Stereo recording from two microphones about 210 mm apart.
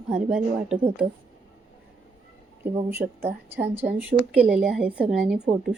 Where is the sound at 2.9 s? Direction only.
10° right (ahead or behind).